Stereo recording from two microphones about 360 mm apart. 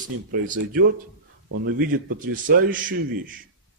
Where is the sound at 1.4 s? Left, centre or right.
Right.